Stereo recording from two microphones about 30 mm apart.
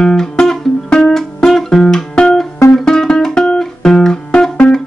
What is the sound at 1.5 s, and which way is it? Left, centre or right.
Guitar, centre.